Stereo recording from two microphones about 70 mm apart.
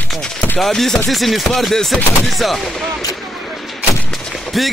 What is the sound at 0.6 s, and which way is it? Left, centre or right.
Chopping, centre.